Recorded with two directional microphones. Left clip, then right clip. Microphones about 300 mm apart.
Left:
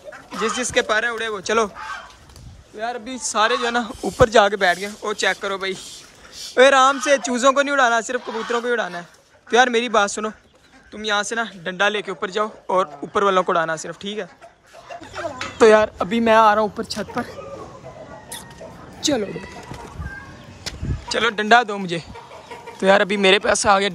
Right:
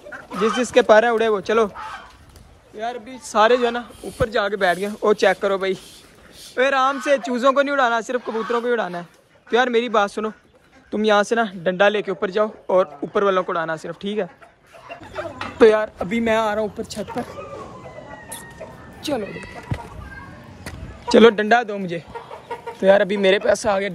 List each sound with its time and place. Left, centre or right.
0.4 s speech: centre
2.8 s speech: centre
15.1 s dog: centre
16.0 s speech: centre
21.1 s a man's voice: centre
21.5 s speech: centre